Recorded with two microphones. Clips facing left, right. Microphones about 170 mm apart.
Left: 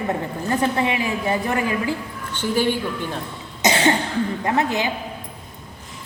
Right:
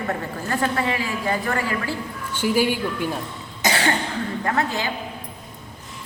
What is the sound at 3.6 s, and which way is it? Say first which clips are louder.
Cough: left 4 dB; 20° left (ahead or behind).